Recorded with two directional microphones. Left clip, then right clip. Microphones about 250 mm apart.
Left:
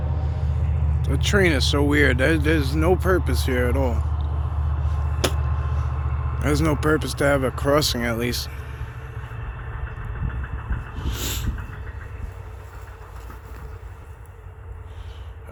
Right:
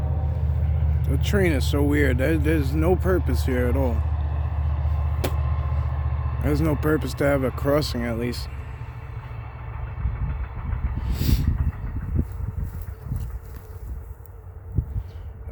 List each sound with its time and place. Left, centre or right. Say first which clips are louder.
1.0 s speech: left 4 dB; centre
5.4 s vehicle: left 1 dB; right
6.4 s speech: left 2 dB; centre
11.0 s a sound: left 1 dB; centre